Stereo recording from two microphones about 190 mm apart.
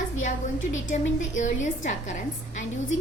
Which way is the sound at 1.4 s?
40° left (ahead or behind).